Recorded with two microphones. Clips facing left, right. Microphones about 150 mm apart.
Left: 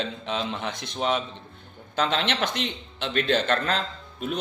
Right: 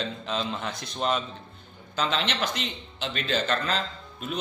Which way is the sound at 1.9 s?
55° left (ahead or behind).